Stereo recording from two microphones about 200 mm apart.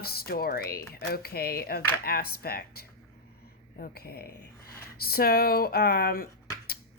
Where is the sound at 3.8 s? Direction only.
50° left (ahead or behind).